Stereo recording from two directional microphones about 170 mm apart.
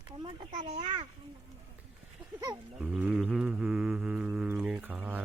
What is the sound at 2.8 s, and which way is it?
Mantra, 5° right (ahead or behind).